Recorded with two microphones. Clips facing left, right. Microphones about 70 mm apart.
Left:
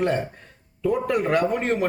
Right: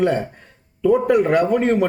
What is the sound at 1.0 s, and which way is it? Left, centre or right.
Speech, centre.